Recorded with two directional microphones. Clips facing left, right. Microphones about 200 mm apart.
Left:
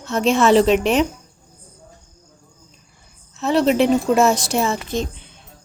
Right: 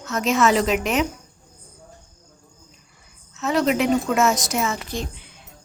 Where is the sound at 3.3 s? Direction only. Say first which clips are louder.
Left 4 dB; 30° left (ahead or behind).